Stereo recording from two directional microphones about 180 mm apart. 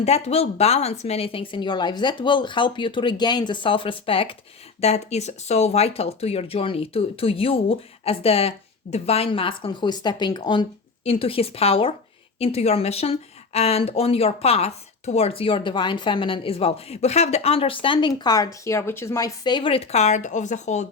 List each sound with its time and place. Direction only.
0.0 s speech: 35° left (ahead or behind)